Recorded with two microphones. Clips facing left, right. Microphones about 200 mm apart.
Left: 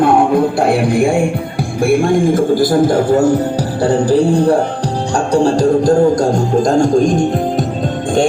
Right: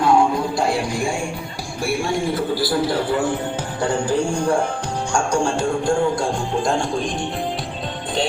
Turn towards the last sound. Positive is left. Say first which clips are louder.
# left 11 dB
turn(degrees=45)  # may be behind; listen again after turning